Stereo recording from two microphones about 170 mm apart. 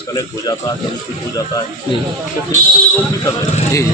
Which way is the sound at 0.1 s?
25° left (ahead or behind).